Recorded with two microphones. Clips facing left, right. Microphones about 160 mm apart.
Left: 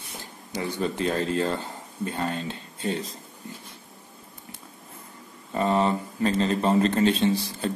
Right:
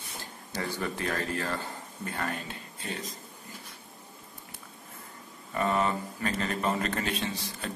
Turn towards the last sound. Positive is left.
turn(degrees=30)  # may be behind; listen again after turning